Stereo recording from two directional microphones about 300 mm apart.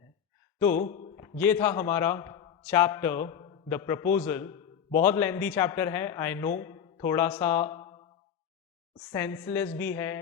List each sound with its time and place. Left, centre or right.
0.6 s a man's voice: centre
0.9 s a sound: left
1.4 s a man's voice: centre
9.1 s a man's voice: centre